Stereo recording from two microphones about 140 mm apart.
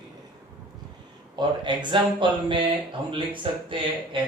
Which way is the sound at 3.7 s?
35° right (ahead or behind).